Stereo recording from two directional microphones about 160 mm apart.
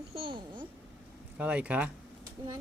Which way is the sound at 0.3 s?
30° right (ahead or behind).